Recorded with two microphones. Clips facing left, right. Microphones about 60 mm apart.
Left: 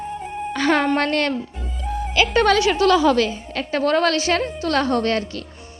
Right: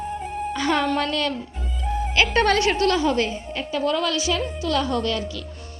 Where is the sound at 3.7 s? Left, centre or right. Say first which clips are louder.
Left 5 dB; left.